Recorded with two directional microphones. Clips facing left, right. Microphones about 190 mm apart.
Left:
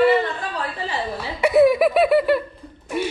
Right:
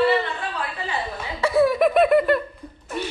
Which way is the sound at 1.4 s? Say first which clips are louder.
Left 3 dB; 15° left (ahead or behind).